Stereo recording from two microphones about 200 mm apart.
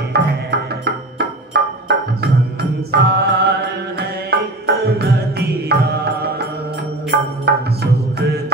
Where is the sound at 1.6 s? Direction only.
55° right (ahead or behind).